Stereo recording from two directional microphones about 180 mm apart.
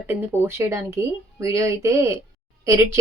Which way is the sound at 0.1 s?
10° right (ahead or behind).